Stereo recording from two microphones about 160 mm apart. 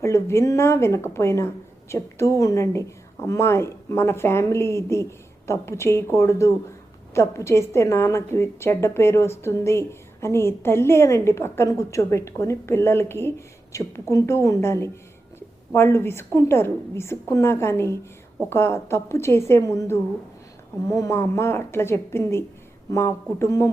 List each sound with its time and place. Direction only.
0.0 s a woman's voice: 15° left (ahead or behind)